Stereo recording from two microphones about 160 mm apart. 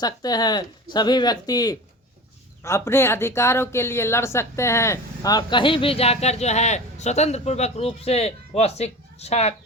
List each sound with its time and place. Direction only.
0.0 s speech: 25° left (ahead or behind); by 9.6 s 40° left (ahead or behind)